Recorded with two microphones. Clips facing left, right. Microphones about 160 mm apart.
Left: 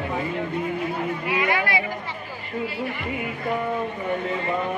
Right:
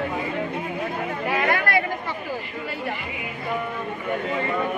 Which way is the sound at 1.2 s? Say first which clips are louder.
Right 2 dB; 50° right (ahead or behind).